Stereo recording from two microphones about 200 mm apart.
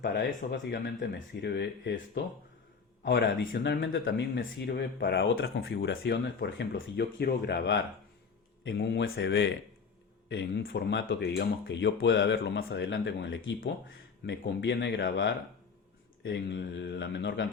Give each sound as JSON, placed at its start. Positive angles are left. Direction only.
{"t": 0.0, "sound": "speech", "side_deg": 60}